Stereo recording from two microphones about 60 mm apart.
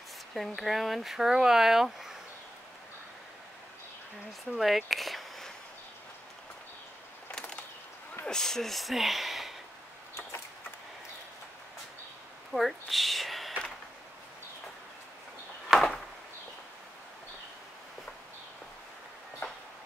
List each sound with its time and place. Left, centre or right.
0.3 s speech: centre
4.5 s speech: centre
7.2 s a sound: centre
8.3 s speech: centre
12.5 s speech: centre
15.7 s a sound: centre